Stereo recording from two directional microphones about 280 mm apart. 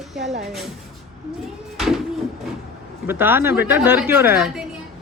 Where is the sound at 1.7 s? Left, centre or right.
Centre.